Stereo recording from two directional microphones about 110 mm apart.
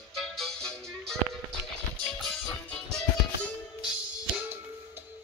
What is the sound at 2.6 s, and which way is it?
Music, 10° left (ahead or behind).